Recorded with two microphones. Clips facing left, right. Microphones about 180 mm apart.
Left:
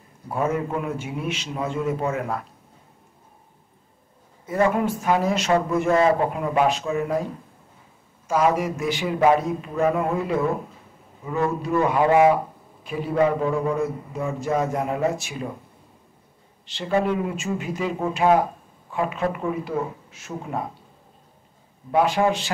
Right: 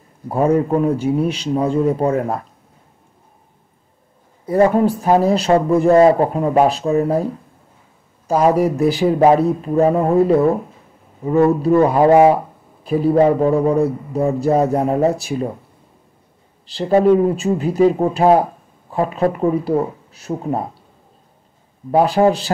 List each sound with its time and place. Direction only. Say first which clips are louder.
0.3 s speech: right 9 dB; 35° right (ahead or behind)
4.5 s speech: right 7 dB; 35° right (ahead or behind)
8.3 s speech: right 6 dB; 35° right (ahead or behind)
16.6 s speech: right 9 dB; 35° right (ahead or behind)
21.9 s speech: right 6 dB; 35° right (ahead or behind)